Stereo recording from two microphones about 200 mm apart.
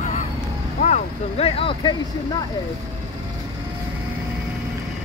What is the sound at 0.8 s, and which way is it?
Speech, 35° left (ahead or behind).